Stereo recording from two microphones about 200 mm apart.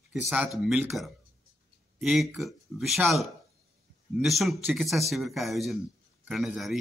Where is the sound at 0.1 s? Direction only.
5° right (ahead or behind).